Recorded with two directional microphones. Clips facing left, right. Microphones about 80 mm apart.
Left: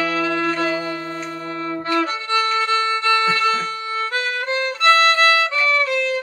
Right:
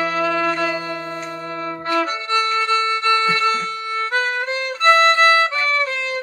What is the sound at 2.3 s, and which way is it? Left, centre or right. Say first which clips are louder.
Violin: right 1 dB; left.